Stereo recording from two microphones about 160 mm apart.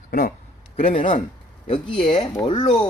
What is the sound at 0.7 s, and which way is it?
Speech, 35° left (ahead or behind).